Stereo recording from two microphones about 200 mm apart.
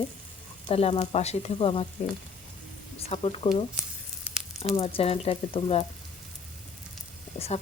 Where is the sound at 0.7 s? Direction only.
30° left (ahead or behind).